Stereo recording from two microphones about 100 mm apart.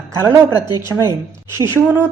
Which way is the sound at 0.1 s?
30° right (ahead or behind).